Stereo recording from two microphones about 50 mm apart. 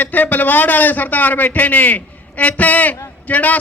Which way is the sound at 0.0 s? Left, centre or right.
Left.